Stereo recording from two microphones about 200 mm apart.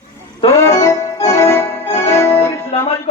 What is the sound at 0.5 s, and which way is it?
Music, 15° left (ahead or behind).